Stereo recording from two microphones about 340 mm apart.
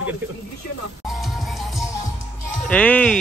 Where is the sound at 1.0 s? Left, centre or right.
Centre.